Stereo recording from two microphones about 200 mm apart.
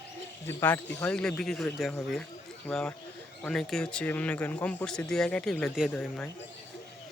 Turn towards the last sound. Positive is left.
turn(degrees=5)  # may be behind; listen again after turning